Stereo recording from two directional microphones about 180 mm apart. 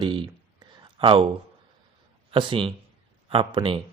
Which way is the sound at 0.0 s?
25° right (ahead or behind).